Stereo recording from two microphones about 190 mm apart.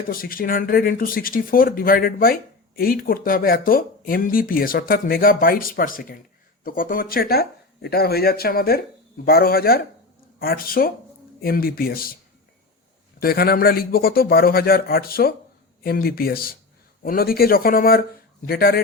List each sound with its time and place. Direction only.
0.1 s speech: 50° left (ahead or behind)
13.1 s speech: 55° left (ahead or behind)